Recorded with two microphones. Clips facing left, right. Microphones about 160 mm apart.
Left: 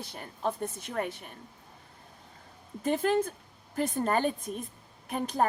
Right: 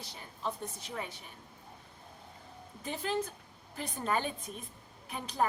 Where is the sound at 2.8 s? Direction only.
50° left (ahead or behind).